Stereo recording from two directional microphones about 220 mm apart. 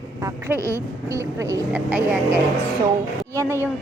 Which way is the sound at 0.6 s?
10° left (ahead or behind).